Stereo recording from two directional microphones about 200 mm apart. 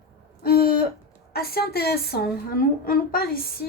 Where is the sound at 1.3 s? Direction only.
50° left (ahead or behind).